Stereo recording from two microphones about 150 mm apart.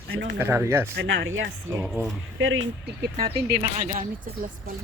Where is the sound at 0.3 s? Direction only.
15° right (ahead or behind).